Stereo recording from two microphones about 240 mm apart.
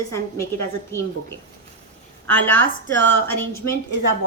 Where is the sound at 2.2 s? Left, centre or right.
Centre.